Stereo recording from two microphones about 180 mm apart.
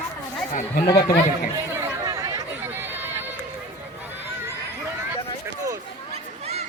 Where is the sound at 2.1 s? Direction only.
20° right (ahead or behind).